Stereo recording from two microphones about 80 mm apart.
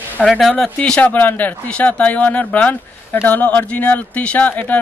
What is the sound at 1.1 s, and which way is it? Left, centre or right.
A man's voice, left.